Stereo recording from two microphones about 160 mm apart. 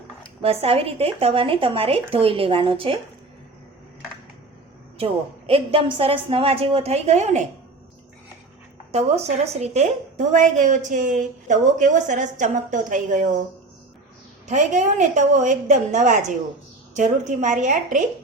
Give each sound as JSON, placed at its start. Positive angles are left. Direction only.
{"t": 0.4, "sound": "speech", "side_deg": -40}
{"t": 4.9, "sound": "speech", "side_deg": -35}
{"t": 8.9, "sound": "a woman's voice", "side_deg": -40}
{"t": 14.4, "sound": "a woman's voice", "side_deg": -50}